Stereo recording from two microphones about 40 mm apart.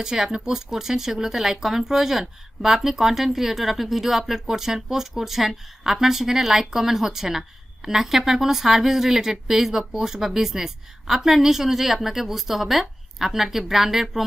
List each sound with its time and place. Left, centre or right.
0.0 s speech: centre